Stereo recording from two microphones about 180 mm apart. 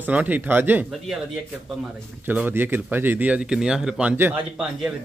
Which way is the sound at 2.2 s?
10° right (ahead or behind).